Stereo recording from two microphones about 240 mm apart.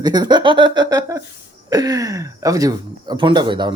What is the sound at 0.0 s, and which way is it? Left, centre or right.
Speech, centre.